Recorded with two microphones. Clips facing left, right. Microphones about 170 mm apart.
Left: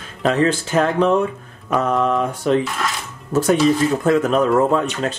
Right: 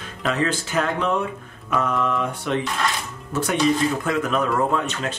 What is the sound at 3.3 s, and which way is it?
Speech, 40° left (ahead or behind).